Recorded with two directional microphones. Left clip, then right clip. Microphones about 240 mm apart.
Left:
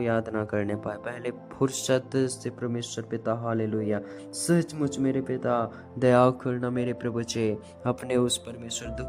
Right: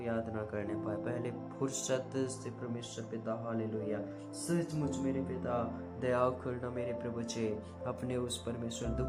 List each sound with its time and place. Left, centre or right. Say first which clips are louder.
0.0 s speech: left 10 dB; left